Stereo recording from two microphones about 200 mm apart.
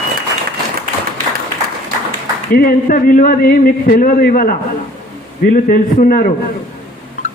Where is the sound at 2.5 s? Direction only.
45° left (ahead or behind).